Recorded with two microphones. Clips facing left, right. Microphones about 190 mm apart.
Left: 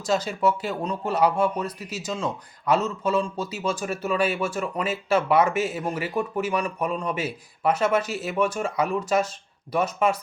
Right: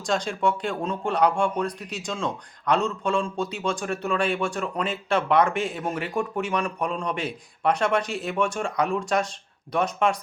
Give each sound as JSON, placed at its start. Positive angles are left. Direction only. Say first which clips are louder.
{"t": 0.0, "sound": "speech", "louder": "left 2 dB", "side_deg": 5}